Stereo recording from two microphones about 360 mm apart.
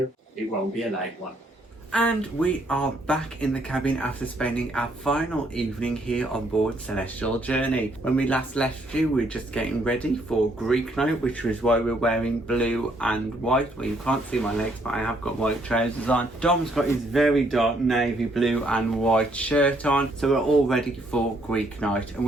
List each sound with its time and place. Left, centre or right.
1.9 s speech: centre